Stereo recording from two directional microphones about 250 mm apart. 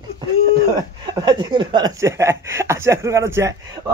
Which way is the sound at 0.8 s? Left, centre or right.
Centre.